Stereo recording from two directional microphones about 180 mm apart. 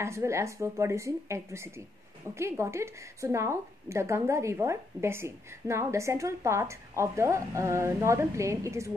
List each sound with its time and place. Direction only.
0.0 s a woman's voice: 15° right (ahead or behind)